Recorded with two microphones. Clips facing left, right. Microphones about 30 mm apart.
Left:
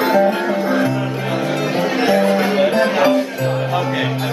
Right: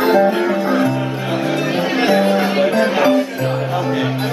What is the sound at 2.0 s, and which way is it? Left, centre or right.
Music, right.